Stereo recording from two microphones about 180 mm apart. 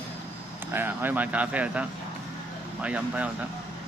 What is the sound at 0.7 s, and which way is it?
Speech, 10° right (ahead or behind).